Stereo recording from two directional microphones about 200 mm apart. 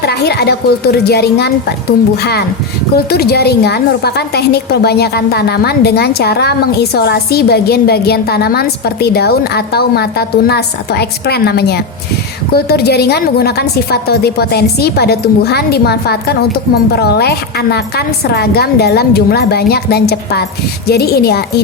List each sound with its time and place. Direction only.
0.0 s a woman's voice: 55° left (ahead or behind)
2.9 s a woman's voice: 50° left (ahead or behind)